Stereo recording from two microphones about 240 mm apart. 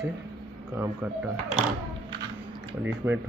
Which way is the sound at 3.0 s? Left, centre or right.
Centre.